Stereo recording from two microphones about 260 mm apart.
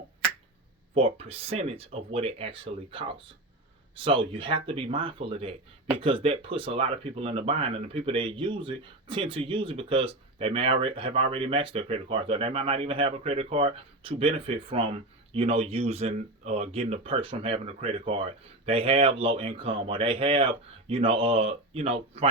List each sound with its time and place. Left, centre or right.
0.9 s speech: right